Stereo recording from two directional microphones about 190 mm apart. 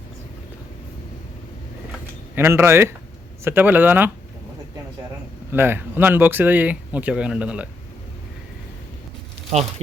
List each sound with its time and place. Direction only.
2.3 s speech: 10° right (ahead or behind)
5.5 s speech: 10° right (ahead or behind)
9.5 s speech: 35° right (ahead or behind)